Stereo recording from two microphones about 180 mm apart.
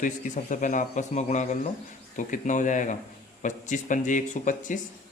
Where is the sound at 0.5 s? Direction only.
45° left (ahead or behind).